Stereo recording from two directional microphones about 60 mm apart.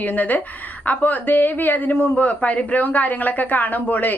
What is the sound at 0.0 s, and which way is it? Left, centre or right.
Speech, left.